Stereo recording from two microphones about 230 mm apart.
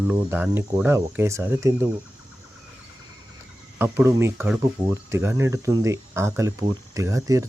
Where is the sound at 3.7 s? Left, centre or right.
Centre.